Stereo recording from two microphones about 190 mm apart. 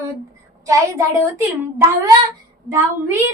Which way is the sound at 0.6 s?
15° right (ahead or behind).